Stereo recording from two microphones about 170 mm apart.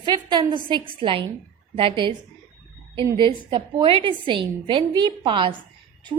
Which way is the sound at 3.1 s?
30° right (ahead or behind).